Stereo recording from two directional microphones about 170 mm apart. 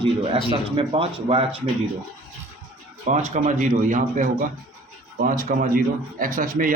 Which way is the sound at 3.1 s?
45° right (ahead or behind).